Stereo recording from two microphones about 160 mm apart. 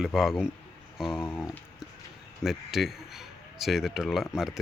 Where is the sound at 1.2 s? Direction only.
15° left (ahead or behind).